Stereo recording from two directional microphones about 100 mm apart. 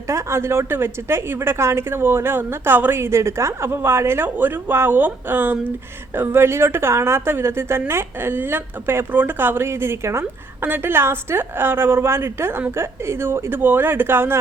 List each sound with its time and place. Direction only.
0.1 s a woman's voice: 25° right (ahead or behind)